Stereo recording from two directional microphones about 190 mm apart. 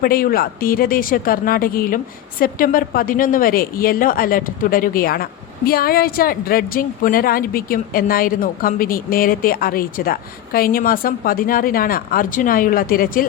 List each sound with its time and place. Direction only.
0.0 s a woman's voice: 50° left (ahead or behind)